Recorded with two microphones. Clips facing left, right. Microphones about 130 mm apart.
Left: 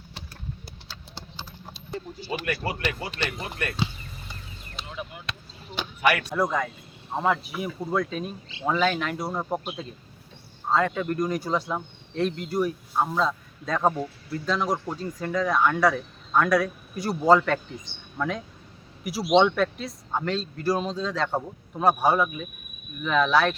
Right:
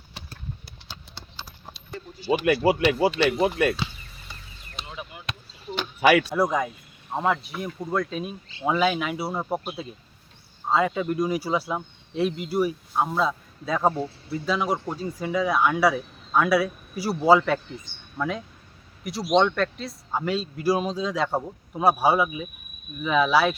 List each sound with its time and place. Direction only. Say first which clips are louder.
0.9 s clip-clop: right 4 dB; 15° right (ahead or behind)
3.0 s speech: right 12 dB; 90° right
5.7 s a sound: right 5 dB; 10° left (ahead or behind)
6.3 s a man's voice: right 2 dB; 10° right (ahead or behind)
7.1 s a man's voice: even; centre (ahead or behind)